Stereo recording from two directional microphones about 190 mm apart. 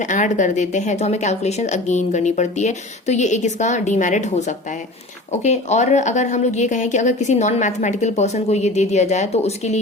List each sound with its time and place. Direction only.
0.0 s a woman's voice: 40° left (ahead or behind)